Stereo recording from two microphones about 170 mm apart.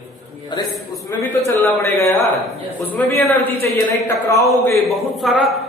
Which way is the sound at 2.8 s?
10° left (ahead or behind).